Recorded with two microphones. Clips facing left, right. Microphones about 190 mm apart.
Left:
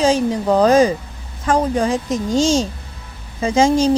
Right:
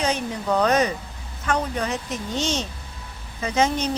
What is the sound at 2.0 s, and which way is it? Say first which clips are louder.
Speech: left 10 dB; 90° left.